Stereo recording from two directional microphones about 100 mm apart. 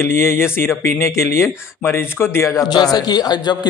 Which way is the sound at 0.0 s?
25° left (ahead or behind).